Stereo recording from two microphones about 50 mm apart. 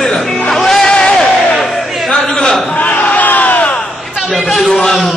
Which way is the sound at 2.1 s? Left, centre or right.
Centre.